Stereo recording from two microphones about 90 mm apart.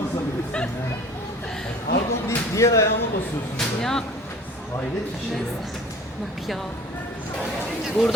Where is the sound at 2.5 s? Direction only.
35° left (ahead or behind).